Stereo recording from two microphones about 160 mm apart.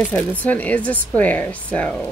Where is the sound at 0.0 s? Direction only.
10° left (ahead or behind).